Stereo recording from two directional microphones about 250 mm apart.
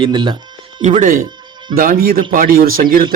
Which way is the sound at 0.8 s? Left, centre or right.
Right.